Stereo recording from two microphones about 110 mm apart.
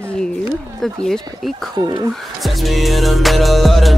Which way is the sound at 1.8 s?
40° right (ahead or behind).